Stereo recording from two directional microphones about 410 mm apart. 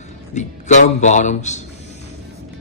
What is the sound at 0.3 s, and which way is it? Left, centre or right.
Speech, centre.